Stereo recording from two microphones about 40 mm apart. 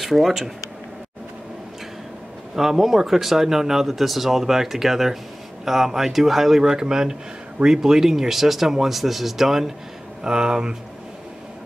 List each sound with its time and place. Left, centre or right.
0.0 s speech: centre
2.5 s speech: centre